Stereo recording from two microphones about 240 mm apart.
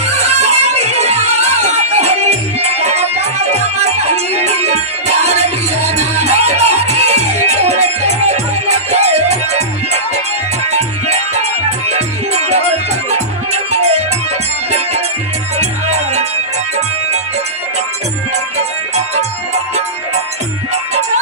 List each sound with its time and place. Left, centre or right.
0.0 s music: right
10.7 s music: right
15.6 s music: right